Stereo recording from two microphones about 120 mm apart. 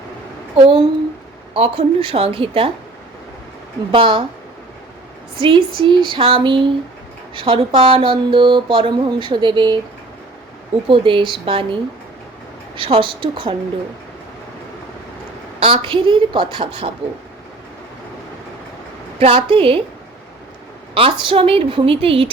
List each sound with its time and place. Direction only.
0.5 s speech: 50° right (ahead or behind)
3.9 s speech: 45° right (ahead or behind)
5.4 s speech: 45° right (ahead or behind)
10.8 s speech: 45° right (ahead or behind)
15.6 s speech: 50° right (ahead or behind)
19.2 s speech: 45° right (ahead or behind)
20.9 s speech: 45° right (ahead or behind)